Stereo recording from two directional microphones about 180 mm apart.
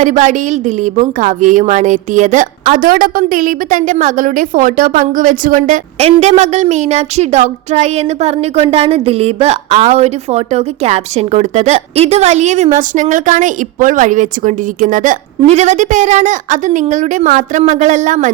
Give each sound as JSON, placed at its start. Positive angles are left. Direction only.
{"t": 0.0, "sound": "a woman's voice", "side_deg": -45}